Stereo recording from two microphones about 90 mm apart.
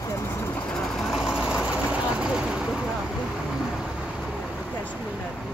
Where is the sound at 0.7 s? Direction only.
5° left (ahead or behind).